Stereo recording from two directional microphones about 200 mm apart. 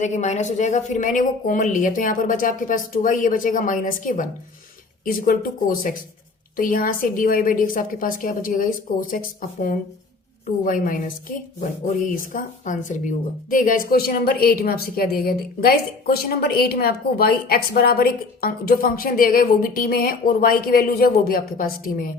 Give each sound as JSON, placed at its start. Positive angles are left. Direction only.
{"t": 0.0, "sound": "a woman's voice", "side_deg": 35}
{"t": 10.6, "sound": "a woman's voice", "side_deg": 45}